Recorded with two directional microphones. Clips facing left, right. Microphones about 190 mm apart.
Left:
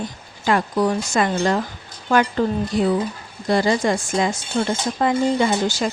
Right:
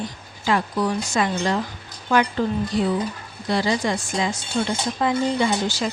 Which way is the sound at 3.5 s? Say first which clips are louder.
Left 4 dB; 50° left (ahead or behind).